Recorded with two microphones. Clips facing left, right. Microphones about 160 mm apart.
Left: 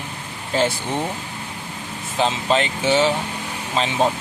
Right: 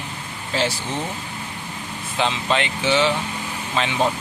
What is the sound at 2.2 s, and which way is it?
Speech, 40° left (ahead or behind).